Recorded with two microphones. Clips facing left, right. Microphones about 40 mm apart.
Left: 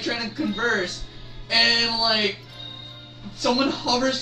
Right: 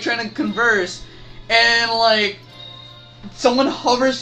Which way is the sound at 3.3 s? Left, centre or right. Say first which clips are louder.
Right 6 dB; right.